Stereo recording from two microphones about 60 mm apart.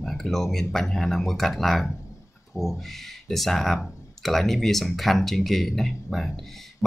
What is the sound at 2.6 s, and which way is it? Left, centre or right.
Speech, left.